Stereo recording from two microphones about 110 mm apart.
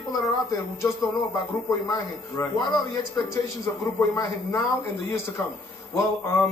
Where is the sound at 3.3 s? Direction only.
30° left (ahead or behind).